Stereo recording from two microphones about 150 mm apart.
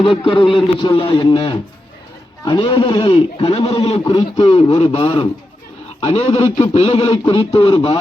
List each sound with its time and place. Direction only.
0.3 s a man's voice: 35° left (ahead or behind)